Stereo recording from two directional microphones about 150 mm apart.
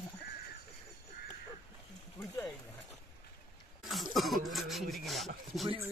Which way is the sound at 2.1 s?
20° left (ahead or behind).